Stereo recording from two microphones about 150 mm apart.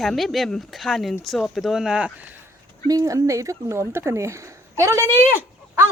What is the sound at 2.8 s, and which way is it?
Speech, 25° right (ahead or behind).